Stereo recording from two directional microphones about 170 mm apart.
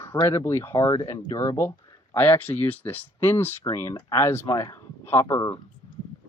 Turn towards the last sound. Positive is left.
turn(degrees=15)  # may be behind; listen again after turning